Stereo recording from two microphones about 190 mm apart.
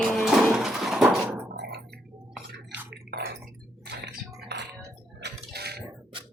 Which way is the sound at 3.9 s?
60° right (ahead or behind).